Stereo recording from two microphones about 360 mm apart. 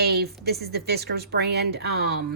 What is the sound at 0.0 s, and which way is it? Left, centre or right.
A woman's voice, right.